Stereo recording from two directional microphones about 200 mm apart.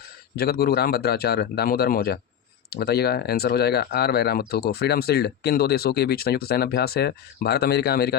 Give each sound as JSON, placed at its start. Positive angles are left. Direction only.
{"t": 0.3, "sound": "speech", "side_deg": 50}